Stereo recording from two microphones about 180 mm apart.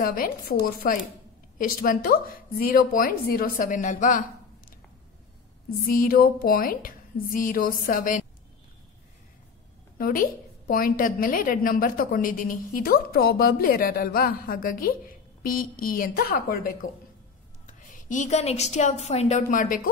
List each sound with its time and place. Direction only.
0.0 s a woman's voice: 55° left (ahead or behind)
5.9 s a woman's voice: 55° left (ahead or behind)
9.9 s a woman's voice: 55° left (ahead or behind)